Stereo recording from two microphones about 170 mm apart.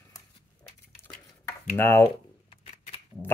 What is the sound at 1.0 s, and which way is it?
Stir, 15° left (ahead or behind).